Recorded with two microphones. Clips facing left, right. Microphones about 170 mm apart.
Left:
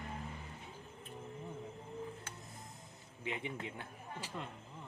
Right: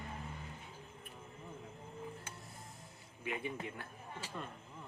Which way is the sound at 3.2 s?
20° left (ahead or behind).